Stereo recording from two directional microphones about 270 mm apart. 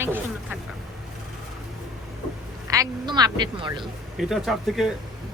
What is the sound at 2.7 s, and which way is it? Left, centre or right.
A woman's voice, centre.